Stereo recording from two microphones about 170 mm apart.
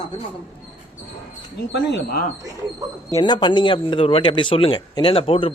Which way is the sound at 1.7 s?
65° left (ahead or behind).